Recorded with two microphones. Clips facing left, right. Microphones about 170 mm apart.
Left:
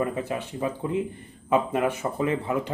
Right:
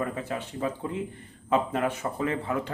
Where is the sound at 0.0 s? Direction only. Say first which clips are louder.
Left 4 dB; 15° left (ahead or behind).